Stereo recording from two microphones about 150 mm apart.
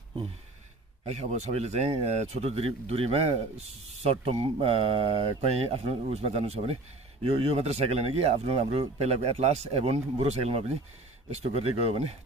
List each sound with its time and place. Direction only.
1.0 s speech: 50° right (ahead or behind)